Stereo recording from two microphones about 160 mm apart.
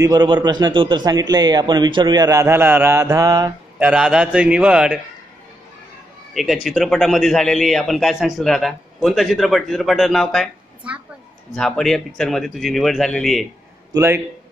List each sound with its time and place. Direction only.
0.0 s a man's voice: 25° right (ahead or behind)
3.8 s a man's voice: 5° right (ahead or behind)
6.3 s a man's voice: centre (ahead or behind)
13.9 s speech: 15° right (ahead or behind)